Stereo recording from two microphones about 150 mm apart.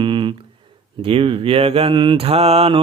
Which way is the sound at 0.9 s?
35° right (ahead or behind).